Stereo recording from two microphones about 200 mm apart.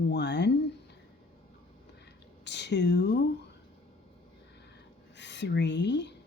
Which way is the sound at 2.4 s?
60° left (ahead or behind).